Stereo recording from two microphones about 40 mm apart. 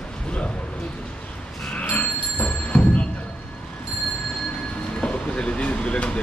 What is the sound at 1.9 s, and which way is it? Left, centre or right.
Music, left.